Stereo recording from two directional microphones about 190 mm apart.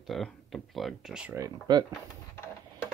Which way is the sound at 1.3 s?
20° right (ahead or behind).